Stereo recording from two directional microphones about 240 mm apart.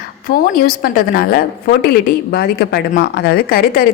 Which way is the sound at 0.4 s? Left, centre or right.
Left.